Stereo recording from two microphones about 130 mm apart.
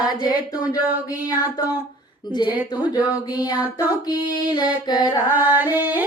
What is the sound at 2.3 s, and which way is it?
Music, 35° left (ahead or behind).